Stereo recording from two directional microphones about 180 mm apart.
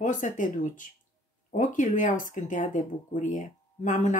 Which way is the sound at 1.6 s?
45° left (ahead or behind).